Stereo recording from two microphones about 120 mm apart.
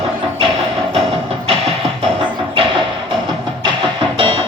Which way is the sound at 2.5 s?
45° right (ahead or behind).